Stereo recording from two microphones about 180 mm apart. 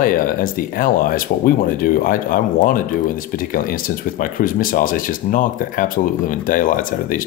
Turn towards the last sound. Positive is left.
turn(degrees=50)  # may be behind; listen again after turning